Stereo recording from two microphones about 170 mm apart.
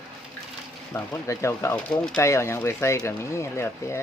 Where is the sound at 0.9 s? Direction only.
15° left (ahead or behind).